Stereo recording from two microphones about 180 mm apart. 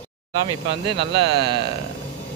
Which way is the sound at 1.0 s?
75° right (ahead or behind).